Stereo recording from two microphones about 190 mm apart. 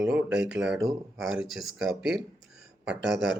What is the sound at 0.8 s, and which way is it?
Speech, 15° right (ahead or behind).